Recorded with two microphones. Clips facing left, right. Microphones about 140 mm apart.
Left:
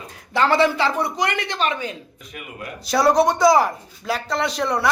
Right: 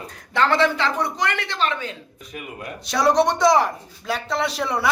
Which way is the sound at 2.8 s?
Centre (ahead or behind).